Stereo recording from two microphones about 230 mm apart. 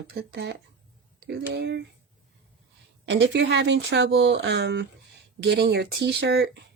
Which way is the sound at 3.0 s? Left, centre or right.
Right.